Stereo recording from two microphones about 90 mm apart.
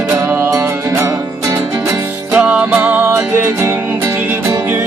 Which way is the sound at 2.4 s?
10° right (ahead or behind).